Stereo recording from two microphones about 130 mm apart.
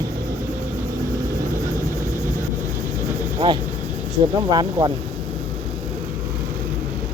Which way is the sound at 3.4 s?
40° right (ahead or behind).